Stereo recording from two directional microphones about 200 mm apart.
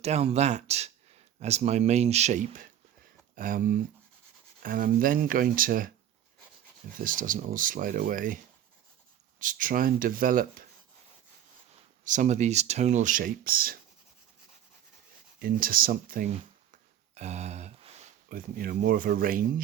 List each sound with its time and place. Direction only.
0.0 s speech: 35° right (ahead or behind)
7.0 s speech: 45° right (ahead or behind)
9.4 s speech: 45° right (ahead or behind)
12.0 s speech: 40° right (ahead or behind)
15.4 s speech: 45° right (ahead or behind)
17.2 s speech: 35° right (ahead or behind)